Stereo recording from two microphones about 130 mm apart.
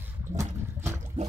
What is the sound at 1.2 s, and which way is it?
Water, 70° right (ahead or behind).